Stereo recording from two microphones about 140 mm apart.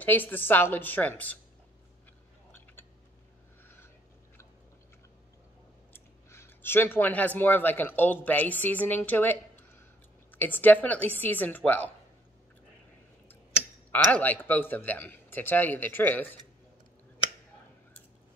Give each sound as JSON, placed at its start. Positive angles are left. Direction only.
{"t": 0.0, "sound": "speech", "side_deg": 15}
{"t": 3.6, "sound": "a sound", "side_deg": 15}
{"t": 5.9, "sound": "speech", "side_deg": 15}
{"t": 13.9, "sound": "speech", "side_deg": 10}